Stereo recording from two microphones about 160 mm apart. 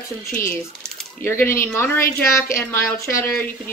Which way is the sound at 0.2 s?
15° left (ahead or behind).